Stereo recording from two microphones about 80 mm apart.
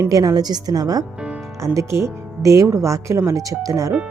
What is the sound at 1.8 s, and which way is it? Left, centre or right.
Speech, right.